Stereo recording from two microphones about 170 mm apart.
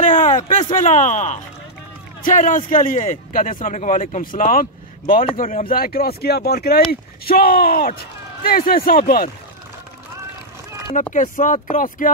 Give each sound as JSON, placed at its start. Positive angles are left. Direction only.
{"t": 0.0, "sound": "a sound", "side_deg": 50}
{"t": 0.3, "sound": "speech", "side_deg": 40}
{"t": 11.1, "sound": "speech", "side_deg": 50}